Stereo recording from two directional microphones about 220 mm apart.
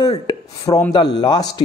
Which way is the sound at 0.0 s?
20° left (ahead or behind).